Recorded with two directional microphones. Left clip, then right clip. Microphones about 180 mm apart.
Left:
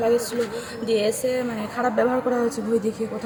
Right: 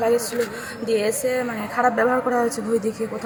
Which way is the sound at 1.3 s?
5° left (ahead or behind).